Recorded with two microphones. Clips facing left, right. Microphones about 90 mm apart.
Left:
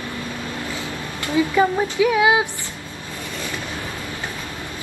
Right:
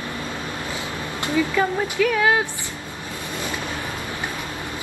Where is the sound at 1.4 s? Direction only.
20° left (ahead or behind).